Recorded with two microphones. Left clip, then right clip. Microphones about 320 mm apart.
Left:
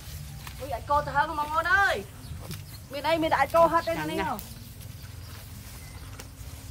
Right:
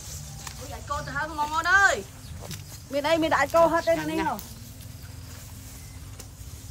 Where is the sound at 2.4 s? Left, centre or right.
Right.